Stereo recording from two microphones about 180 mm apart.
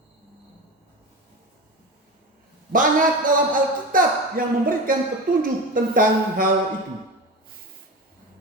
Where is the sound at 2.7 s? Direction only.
50° right (ahead or behind).